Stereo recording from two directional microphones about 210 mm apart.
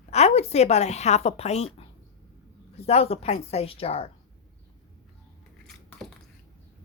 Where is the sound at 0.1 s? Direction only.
30° left (ahead or behind).